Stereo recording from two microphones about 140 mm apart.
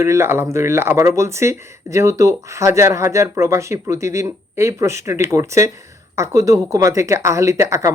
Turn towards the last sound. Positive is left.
turn(degrees=-20)  # may be behind; listen again after turning